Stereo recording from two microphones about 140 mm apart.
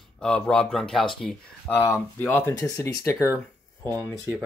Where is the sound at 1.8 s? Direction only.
15° left (ahead or behind).